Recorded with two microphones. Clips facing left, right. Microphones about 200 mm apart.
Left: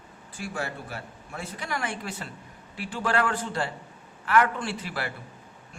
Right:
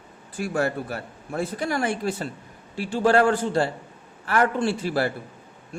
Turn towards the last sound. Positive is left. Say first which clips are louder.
# right 9 dB
turn(degrees=-35)  # may be behind; listen again after turning